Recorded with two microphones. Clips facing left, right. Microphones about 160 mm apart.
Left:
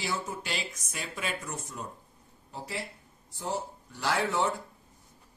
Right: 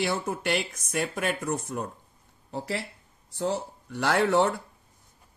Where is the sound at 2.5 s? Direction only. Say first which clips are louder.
Right 6 dB; 75° right (ahead or behind).